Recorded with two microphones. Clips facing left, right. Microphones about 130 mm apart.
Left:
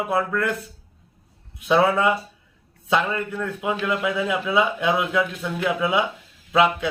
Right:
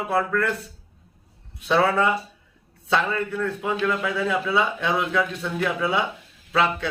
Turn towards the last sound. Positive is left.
turn(degrees=15)  # may be behind; listen again after turning